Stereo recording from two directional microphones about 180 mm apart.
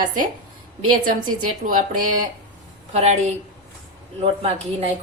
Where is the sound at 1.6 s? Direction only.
45° right (ahead or behind).